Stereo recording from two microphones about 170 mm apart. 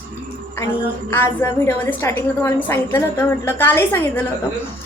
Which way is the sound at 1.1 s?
15° left (ahead or behind).